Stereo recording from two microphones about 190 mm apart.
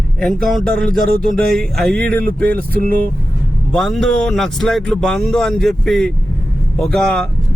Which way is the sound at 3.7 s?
Centre (ahead or behind).